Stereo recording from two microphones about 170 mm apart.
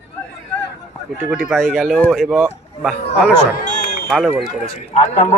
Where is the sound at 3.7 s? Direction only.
45° left (ahead or behind).